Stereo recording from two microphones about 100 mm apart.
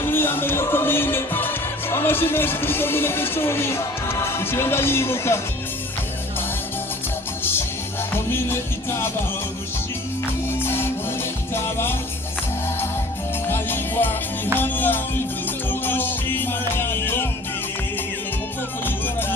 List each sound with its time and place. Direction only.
0.0 s music: 25° left (ahead or behind)
8.3 s music: 25° left (ahead or behind)
10.6 s music: 25° left (ahead or behind)
13.5 s music: 20° left (ahead or behind)